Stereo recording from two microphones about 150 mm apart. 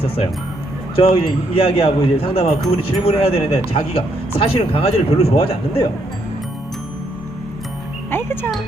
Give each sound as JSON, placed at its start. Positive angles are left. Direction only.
{"t": 0.9, "sound": "speech", "side_deg": 40}
{"t": 8.1, "sound": "music", "side_deg": 15}